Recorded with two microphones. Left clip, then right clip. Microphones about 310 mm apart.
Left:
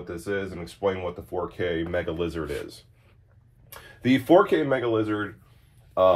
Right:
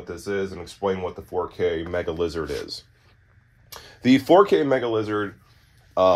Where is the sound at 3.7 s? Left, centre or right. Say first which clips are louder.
Right 4 dB; right.